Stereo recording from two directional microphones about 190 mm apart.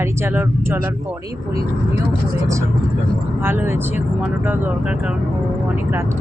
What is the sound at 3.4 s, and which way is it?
Speech, 10° right (ahead or behind).